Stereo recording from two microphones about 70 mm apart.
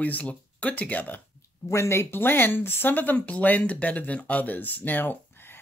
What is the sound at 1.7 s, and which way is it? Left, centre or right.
Speech, left.